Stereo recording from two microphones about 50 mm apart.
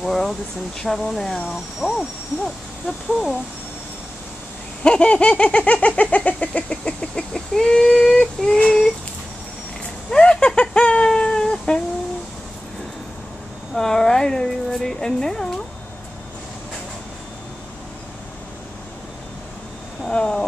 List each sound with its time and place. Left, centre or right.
0.0 s speech: centre
4.8 s a sound: left
6.7 s speech: centre
10.1 s speech: centre
11.1 s a sound: centre
13.7 s speech: centre
20.1 s speech: centre